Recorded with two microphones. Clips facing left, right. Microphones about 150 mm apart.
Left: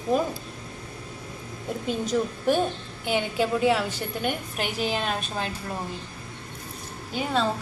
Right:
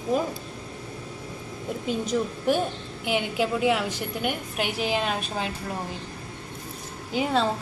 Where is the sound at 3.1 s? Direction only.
10° right (ahead or behind).